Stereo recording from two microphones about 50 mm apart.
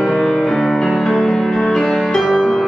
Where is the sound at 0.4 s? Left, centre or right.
Centre.